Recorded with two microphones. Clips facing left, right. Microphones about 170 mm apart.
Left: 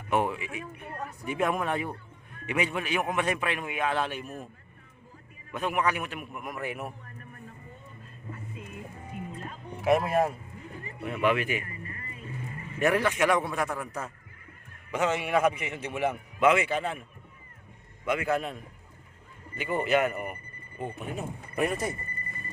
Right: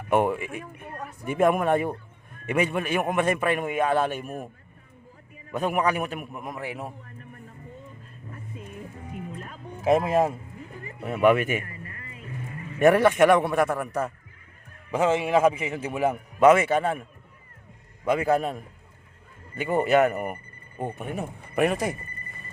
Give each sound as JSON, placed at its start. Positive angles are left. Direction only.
{"t": 0.1, "sound": "speech", "side_deg": -50}
{"t": 5.5, "sound": "a man's voice", "side_deg": -40}
{"t": 6.4, "sound": "speech", "side_deg": -25}
{"t": 9.8, "sound": "speech", "side_deg": -25}
{"t": 11.0, "sound": "speech", "side_deg": -50}
{"t": 12.8, "sound": "a man's voice", "side_deg": -50}
{"t": 14.9, "sound": "a man's voice", "side_deg": -30}
{"t": 18.0, "sound": "a man's voice", "side_deg": -35}